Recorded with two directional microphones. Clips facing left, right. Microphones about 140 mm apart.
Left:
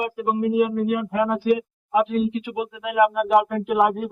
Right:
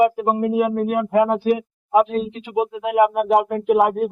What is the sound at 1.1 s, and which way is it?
Speech, 30° right (ahead or behind).